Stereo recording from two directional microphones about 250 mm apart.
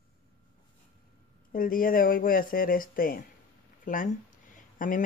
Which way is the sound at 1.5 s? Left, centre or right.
Left.